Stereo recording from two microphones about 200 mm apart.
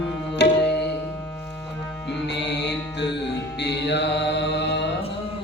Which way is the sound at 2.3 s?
60° left (ahead or behind).